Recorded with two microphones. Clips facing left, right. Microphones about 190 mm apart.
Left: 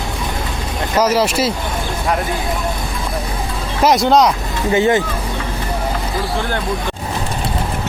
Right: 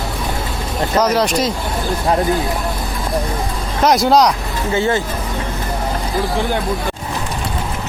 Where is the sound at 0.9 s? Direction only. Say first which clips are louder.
Left 1 dB; 5° left (ahead or behind).